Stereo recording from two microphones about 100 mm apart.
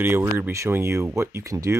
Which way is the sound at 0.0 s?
25° right (ahead or behind).